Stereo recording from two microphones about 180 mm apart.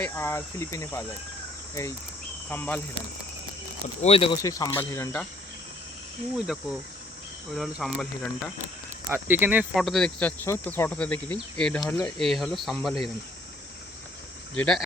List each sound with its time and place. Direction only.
0.0 s speech: 15° left (ahead or behind)
2.5 s speech: 10° left (ahead or behind)
4.0 s speech: 30° left (ahead or behind)
4.4 s speech: 20° left (ahead or behind)
6.3 s speech: 5° right (ahead or behind)
9.0 s speech: 10° right (ahead or behind)
9.7 s speech: centre (ahead or behind)
14.5 s speech: 5° left (ahead or behind)